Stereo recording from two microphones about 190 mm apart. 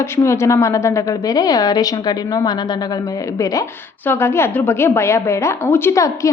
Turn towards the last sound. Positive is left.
turn(degrees=15)  # may be behind; listen again after turning